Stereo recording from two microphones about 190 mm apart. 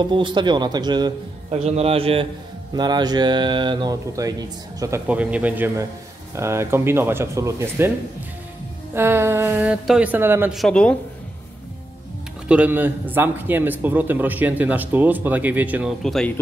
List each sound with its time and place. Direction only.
0.0 s speech: 25° right (ahead or behind)
1.6 s a man's voice: 35° right (ahead or behind); by 7.9 s 15° right (ahead or behind)
8.9 s a man's voice: 10° right (ahead or behind)
10.5 s speech: centre (ahead or behind)
12.4 s a man's voice: 5° right (ahead or behind)
16.0 s speech: 5° left (ahead or behind)